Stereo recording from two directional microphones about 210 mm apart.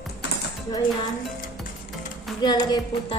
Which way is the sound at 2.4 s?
20° left (ahead or behind).